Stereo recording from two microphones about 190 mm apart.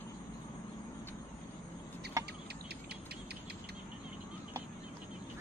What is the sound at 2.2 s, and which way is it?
Chicken, 15° right (ahead or behind).